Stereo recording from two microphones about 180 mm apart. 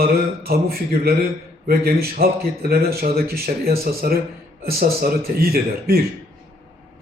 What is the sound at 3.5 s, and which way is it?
Speech, 40° right (ahead or behind).